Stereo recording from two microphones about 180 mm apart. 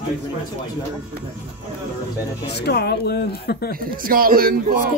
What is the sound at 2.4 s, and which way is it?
Speech, 65° left (ahead or behind).